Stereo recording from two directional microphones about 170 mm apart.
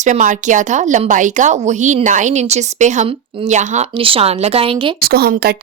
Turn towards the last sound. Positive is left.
turn(degrees=-65)  # may be behind; listen again after turning